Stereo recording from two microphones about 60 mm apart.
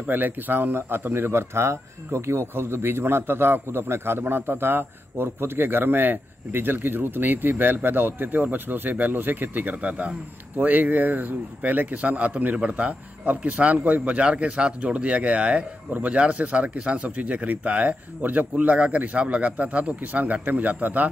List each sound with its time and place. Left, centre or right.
0.1 s speech: right